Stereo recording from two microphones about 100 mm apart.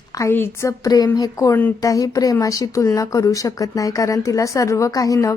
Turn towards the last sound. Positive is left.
turn(degrees=35)  # may be behind; listen again after turning